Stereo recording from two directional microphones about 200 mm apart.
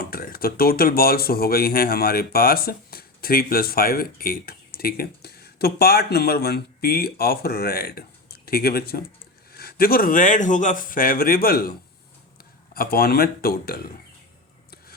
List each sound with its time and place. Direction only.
0.1 s speech: 50° left (ahead or behind)
12.7 s speech: 50° left (ahead or behind)